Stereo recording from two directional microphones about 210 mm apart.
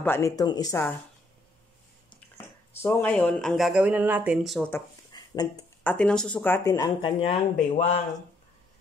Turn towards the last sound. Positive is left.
turn(degrees=35)  # may be behind; listen again after turning